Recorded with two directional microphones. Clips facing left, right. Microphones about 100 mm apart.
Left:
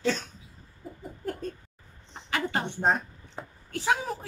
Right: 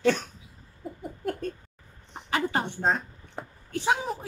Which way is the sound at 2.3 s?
30° right (ahead or behind).